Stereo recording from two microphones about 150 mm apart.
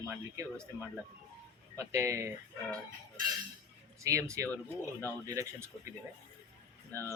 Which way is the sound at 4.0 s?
20° right (ahead or behind).